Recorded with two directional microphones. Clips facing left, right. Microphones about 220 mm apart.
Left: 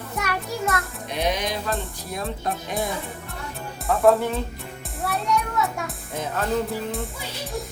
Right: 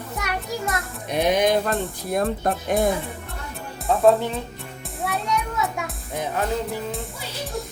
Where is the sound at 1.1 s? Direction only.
50° right (ahead or behind).